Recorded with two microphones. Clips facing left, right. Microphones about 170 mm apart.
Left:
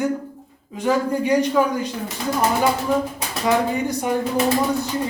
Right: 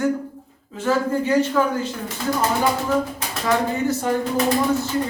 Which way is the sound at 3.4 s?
15° left (ahead or behind).